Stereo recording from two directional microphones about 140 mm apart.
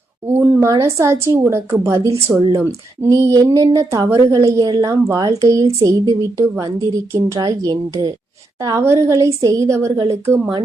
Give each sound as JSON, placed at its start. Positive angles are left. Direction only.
{"t": 0.3, "sound": "a woman's voice", "side_deg": -15}